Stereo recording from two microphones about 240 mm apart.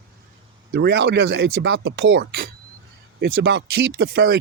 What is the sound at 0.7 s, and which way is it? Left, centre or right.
Speech, right.